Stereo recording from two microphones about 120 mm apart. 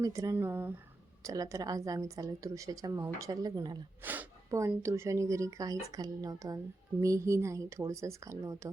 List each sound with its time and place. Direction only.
0.0 s a woman's voice: 25° right (ahead or behind)
4.0 s a woman's voice: 15° right (ahead or behind)